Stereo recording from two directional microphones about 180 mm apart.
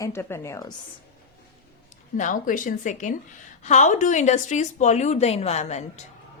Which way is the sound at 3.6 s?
40° left (ahead or behind).